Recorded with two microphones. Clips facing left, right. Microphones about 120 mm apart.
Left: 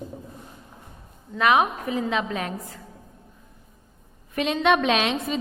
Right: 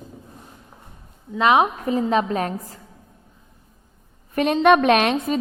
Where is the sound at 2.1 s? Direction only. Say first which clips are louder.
Right 6 dB; 40° right (ahead or behind).